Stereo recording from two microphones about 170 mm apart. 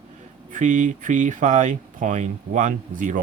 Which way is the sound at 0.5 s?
45° right (ahead or behind).